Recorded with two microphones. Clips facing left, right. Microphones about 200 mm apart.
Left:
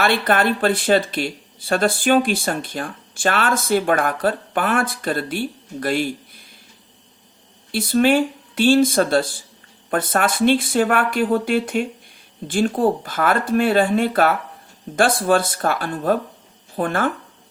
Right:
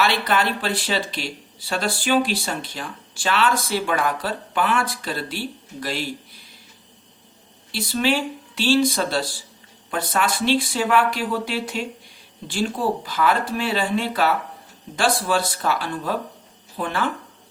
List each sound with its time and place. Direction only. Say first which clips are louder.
0.0 s speech: left 3 dB; 50° left (ahead or behind)
7.7 s speech: left 6 dB; 50° left (ahead or behind)